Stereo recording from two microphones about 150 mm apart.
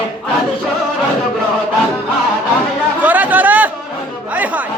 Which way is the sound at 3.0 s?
10° right (ahead or behind).